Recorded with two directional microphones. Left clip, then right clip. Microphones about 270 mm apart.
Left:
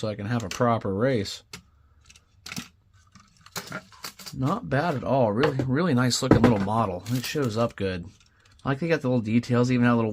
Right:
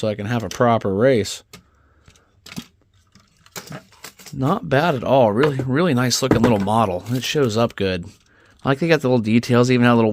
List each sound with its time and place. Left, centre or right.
0.0 s speech: right
2.4 s camera: centre
3.4 s a sound: centre
4.4 s speech: right